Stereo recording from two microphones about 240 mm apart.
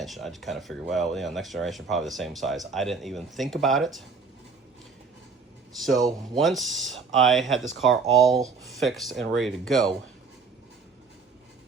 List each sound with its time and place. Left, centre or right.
0.0 s speech: centre
6.3 s speech: centre